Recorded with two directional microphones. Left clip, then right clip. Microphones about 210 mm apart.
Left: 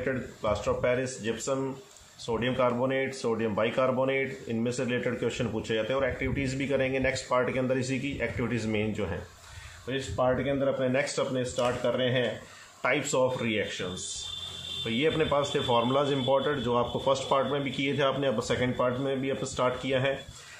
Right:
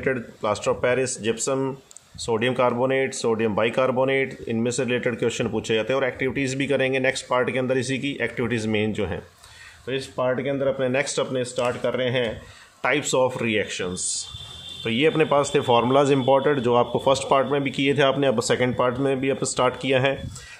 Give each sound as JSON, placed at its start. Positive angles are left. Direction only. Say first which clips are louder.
{"t": 0.0, "sound": "speech", "louder": "right 6 dB", "side_deg": -45}